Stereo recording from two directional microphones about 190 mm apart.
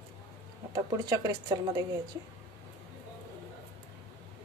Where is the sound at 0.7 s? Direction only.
20° right (ahead or behind).